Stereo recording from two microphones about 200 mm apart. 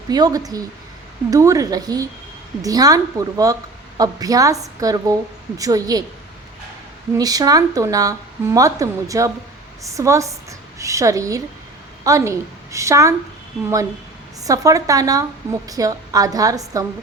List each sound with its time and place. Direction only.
0.1 s a woman's voice: 20° right (ahead or behind)
7.2 s a woman's voice: 20° right (ahead or behind)
14.4 s a woman's voice: 15° right (ahead or behind)